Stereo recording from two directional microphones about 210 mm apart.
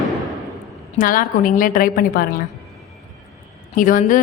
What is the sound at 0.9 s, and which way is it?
A woman's voice, 40° left (ahead or behind).